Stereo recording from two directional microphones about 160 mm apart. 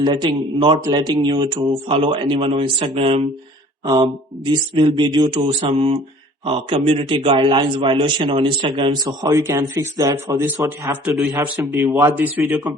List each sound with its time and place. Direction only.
0.0 s a man's voice: 30° right (ahead or behind)
11.0 s a man's voice: centre (ahead or behind)
11.3 s speech: 15° right (ahead or behind)